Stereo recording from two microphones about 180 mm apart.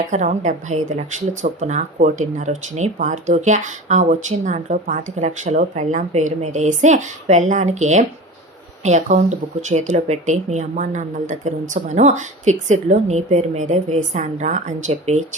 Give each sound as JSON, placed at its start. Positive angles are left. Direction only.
{"t": 0.1, "sound": "speech", "side_deg": -40}